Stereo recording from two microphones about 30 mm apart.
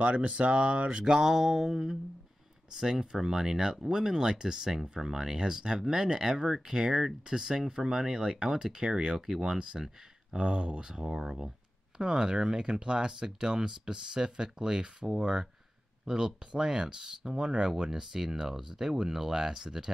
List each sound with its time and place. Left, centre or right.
0.0 s speech: right
1.0 s speech: centre
2.7 s speech: centre
4.8 s speech: right
10.3 s speech: right